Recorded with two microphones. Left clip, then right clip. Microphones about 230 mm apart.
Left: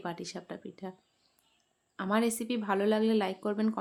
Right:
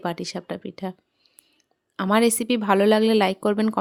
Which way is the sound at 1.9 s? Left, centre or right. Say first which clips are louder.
Right 10 dB; right.